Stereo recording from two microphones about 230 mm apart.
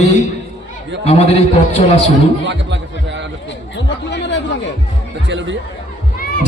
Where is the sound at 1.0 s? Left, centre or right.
Left.